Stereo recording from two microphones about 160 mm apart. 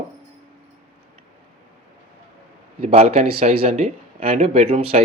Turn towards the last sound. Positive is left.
turn(degrees=-40)  # may be behind; listen again after turning